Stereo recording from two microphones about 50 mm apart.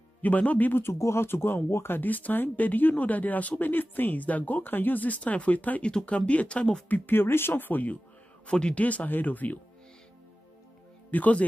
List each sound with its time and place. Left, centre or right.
0.2 s speech: left
0.8 s speech: left
1.2 s speech: left
2.0 s speech: left
5.9 s speech: left
6.9 s speech: left
8.5 s speech: centre
8.8 s speech: left
11.1 s speech: left